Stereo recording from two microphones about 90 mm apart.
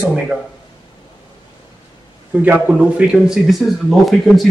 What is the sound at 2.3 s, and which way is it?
Speech, 20° right (ahead or behind).